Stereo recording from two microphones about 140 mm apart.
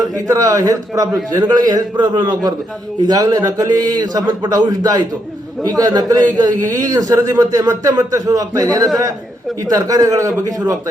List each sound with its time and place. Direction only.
0.3 s a man's voice: 25° right (ahead or behind)